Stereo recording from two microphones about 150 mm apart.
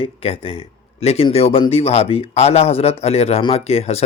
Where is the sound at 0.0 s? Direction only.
40° left (ahead or behind).